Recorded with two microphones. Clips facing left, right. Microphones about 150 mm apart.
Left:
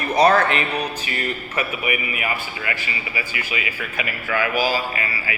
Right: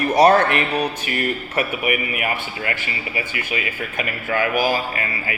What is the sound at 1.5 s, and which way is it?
Speech, 50° right (ahead or behind).